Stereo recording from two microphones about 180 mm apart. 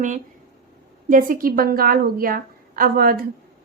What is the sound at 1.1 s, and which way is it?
A woman's voice, 50° right (ahead or behind).